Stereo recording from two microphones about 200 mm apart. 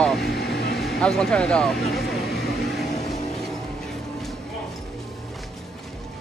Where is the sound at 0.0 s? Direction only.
Centre (ahead or behind).